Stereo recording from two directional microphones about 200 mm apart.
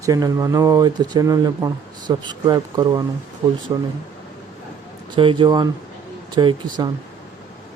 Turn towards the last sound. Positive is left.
turn(degrees=-20)  # may be behind; listen again after turning